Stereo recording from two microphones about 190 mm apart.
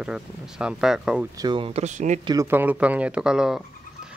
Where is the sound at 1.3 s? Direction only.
25° right (ahead or behind); by 2.1 s 40° right (ahead or behind).